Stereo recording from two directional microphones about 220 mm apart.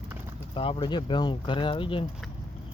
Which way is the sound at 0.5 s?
20° left (ahead or behind).